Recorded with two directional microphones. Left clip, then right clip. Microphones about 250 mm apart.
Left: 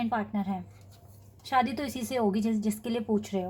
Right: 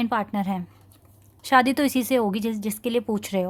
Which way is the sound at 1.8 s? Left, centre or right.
Right.